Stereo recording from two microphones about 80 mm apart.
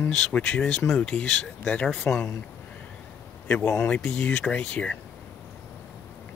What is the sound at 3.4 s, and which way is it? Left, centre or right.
A man's voice, centre.